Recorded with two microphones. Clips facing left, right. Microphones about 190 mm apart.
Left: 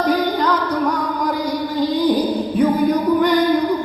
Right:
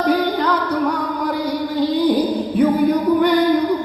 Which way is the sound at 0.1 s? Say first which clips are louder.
Right 2 dB; 60° right (ahead or behind).